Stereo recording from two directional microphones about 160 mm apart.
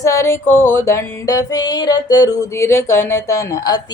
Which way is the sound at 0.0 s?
20° left (ahead or behind).